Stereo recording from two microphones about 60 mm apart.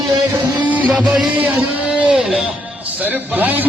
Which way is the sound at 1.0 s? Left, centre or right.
Centre.